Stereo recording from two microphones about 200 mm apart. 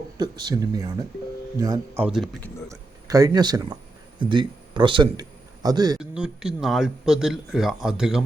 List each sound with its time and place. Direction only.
0.2 s speech: 20° right (ahead or behind)
2.0 s speech: centre (ahead or behind)
2.6 s speech: 15° right (ahead or behind)
6.0 s speech: 5° right (ahead or behind)